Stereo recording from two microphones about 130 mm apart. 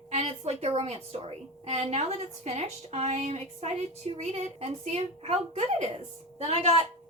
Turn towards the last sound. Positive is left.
turn(degrees=-55)  # may be behind; listen again after turning